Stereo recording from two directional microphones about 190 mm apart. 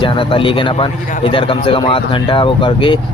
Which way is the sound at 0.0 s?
25° left (ahead or behind).